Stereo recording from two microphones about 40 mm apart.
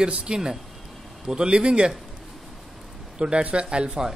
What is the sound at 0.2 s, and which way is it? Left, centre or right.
Speech, centre.